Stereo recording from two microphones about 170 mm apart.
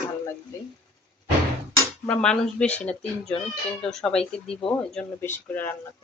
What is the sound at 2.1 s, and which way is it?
Speech, 5° left (ahead or behind).